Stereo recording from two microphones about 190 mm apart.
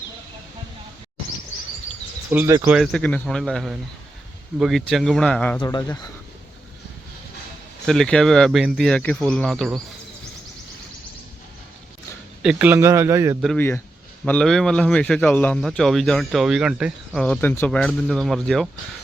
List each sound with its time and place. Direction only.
2.3 s a man's voice: 10° right (ahead or behind); by 5.5 s 5° left (ahead or behind)
5.5 s speech: 20° left (ahead or behind)
7.9 s a man's voice: 5° left (ahead or behind)
12.4 s a man's voice: 5° right (ahead or behind)
13.6 s a man's voice: 15° left (ahead or behind); by 17.2 s 5° right (ahead or behind)
17.2 s a man's voice: 10° left (ahead or behind)